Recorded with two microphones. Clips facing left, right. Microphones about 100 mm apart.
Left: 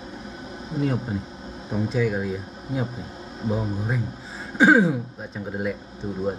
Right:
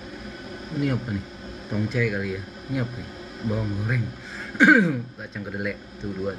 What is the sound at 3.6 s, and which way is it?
Speech, 25° left (ahead or behind).